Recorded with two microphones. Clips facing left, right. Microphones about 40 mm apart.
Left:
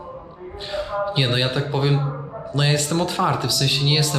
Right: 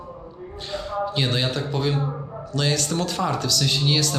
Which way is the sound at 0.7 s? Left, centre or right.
Centre.